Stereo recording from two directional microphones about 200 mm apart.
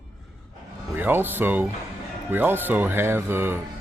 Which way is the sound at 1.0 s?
10° right (ahead or behind).